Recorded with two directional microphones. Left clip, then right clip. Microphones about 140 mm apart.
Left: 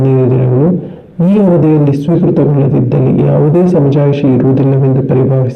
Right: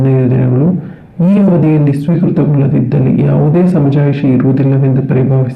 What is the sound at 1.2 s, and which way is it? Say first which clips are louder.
Speech: left 2 dB; 25° left (ahead or behind).